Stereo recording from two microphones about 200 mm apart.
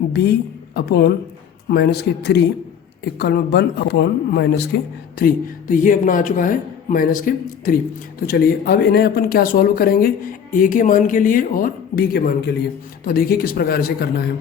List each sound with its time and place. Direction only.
0.1 s a woman's voice: 55° left (ahead or behind)
5.2 s speech: 40° left (ahead or behind)